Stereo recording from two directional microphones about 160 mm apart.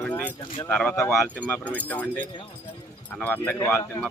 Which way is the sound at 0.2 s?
10° left (ahead or behind).